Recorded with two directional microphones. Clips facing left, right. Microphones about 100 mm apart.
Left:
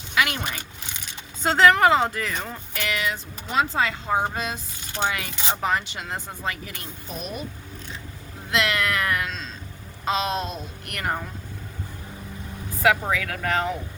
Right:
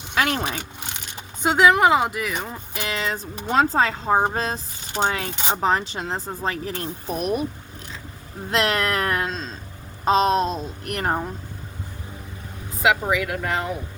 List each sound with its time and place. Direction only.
0.1 s a sound: 35° right (ahead or behind)
1.4 s speech: 15° right (ahead or behind)
3.4 s speech: 45° right (ahead or behind)
7.2 s speech: 60° right (ahead or behind)
8.4 s speech: 35° right (ahead or behind)
12.8 s speech: 15° right (ahead or behind)